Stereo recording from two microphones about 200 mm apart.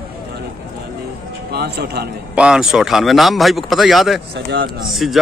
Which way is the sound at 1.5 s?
55° right (ahead or behind).